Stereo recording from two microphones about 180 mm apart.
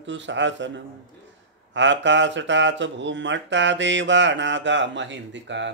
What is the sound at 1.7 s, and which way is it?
Speech, 90° right.